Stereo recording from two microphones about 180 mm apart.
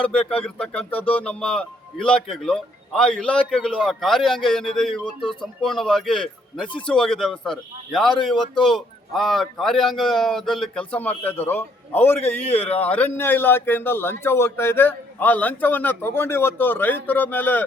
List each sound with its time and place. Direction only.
0.3 s speech: 5° left (ahead or behind)
12.6 s speech: 35° left (ahead or behind)
12.9 s a man's voice: 10° left (ahead or behind)